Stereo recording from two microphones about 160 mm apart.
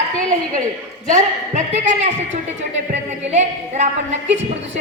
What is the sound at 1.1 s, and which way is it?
A woman's voice, 50° right (ahead or behind).